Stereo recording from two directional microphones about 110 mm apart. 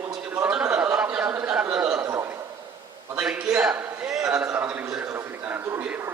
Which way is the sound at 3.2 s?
10° right (ahead or behind).